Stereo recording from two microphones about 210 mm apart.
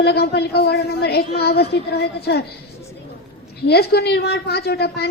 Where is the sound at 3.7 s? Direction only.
50° left (ahead or behind).